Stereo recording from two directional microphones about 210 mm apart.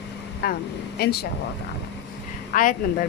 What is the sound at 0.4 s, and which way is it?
Speech, 45° left (ahead or behind).